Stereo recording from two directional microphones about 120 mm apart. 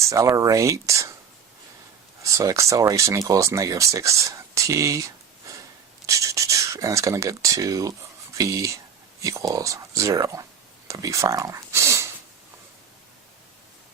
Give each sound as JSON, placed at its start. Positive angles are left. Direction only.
{"t": 0.0, "sound": "speech", "side_deg": -25}
{"t": 2.2, "sound": "speech", "side_deg": -25}
{"t": 10.8, "sound": "a sound", "side_deg": -25}